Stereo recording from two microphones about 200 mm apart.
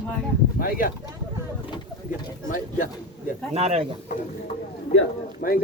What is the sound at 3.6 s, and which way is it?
Speech, 30° right (ahead or behind).